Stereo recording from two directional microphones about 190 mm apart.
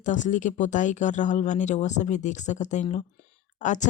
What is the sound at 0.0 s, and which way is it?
Speech, 40° left (ahead or behind).